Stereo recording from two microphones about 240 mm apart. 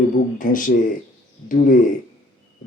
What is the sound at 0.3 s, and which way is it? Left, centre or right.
Speech, left.